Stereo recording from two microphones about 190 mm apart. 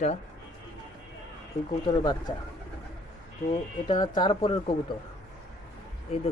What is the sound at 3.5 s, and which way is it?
Speech, 25° left (ahead or behind).